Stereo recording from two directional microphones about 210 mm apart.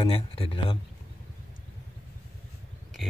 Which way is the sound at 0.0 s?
25° left (ahead or behind).